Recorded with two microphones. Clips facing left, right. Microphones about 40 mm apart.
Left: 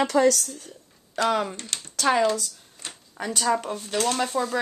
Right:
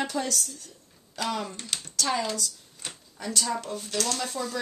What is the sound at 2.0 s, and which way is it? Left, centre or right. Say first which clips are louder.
Speech: left 7 dB; left.